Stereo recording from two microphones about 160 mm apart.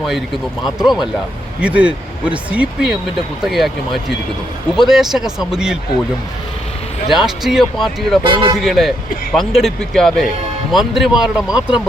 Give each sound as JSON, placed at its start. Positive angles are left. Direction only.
{"t": 0.6, "sound": "speech", "side_deg": -5}
{"t": 7.1, "sound": "speech", "side_deg": -5}
{"t": 8.2, "sound": "speech", "side_deg": -30}
{"t": 8.5, "sound": "speech", "side_deg": 0}